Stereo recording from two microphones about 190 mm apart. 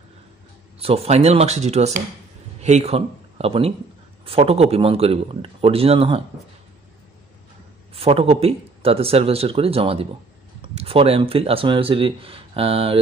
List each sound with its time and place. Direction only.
0.7 s speech: 30° right (ahead or behind)
7.9 s speech: 30° right (ahead or behind)